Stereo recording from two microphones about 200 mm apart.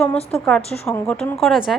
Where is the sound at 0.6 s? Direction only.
30° left (ahead or behind).